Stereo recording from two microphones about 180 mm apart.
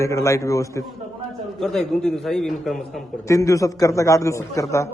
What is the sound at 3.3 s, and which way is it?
Speech, 15° left (ahead or behind).